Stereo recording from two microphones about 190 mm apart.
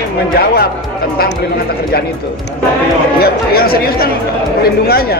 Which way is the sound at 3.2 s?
55° left (ahead or behind).